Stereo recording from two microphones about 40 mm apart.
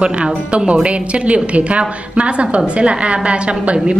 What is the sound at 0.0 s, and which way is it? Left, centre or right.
A woman's voice, right.